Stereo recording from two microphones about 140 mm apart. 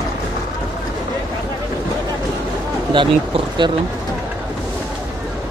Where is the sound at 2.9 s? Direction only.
35° right (ahead or behind).